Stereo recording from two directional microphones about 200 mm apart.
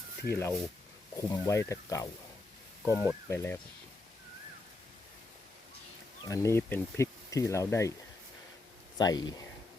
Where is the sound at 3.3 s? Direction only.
15° left (ahead or behind).